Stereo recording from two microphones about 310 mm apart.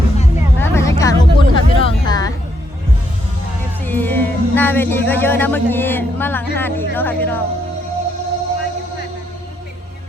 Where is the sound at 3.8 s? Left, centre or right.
Centre.